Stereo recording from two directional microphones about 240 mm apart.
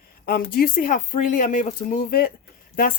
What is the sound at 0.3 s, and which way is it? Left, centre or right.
Speech, left.